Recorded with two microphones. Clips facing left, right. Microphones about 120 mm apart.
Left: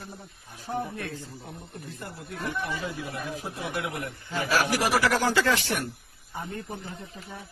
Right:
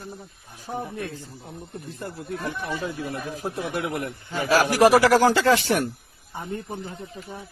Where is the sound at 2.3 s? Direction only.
35° right (ahead or behind).